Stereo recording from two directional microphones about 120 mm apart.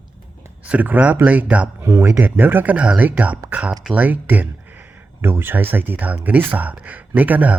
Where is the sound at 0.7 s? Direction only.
15° right (ahead or behind).